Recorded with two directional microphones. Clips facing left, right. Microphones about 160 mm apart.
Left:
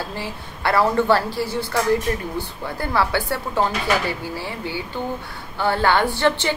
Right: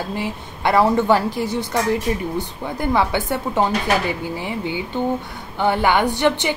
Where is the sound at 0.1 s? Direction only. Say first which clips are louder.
Right 5 dB; 20° right (ahead or behind).